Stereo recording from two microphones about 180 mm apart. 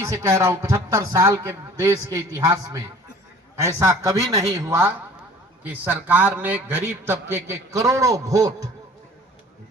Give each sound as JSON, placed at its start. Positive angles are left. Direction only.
{"t": 0.0, "sound": "a man's voice", "side_deg": -15}